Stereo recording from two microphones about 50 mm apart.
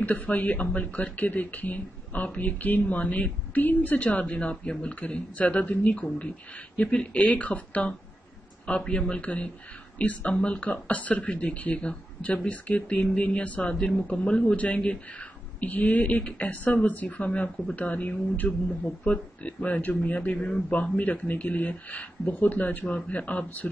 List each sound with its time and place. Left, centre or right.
0.0 s speech: left